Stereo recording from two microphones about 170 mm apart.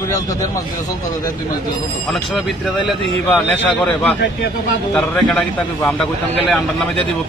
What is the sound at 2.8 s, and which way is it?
A man's voice, centre (ahead or behind).